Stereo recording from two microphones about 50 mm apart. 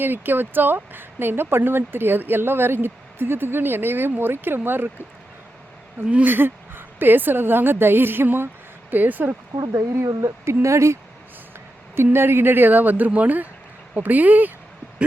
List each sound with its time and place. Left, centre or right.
0.0 s speech: right
6.2 s speech: right
8.9 s speech: right
9.7 s speech: right
12.1 s speech: right